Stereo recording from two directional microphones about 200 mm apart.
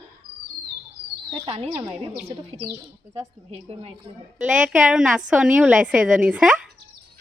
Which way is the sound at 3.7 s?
30° right (ahead or behind).